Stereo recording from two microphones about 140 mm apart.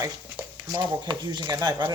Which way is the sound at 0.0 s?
15° right (ahead or behind).